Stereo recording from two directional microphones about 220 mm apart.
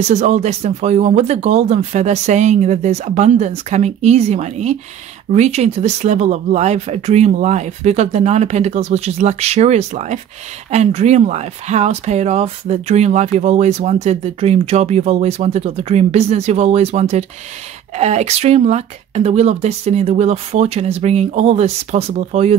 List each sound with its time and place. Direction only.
0.1 s speech: 30° right (ahead or behind)